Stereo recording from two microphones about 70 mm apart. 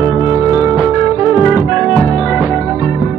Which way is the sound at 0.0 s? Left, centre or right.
Centre.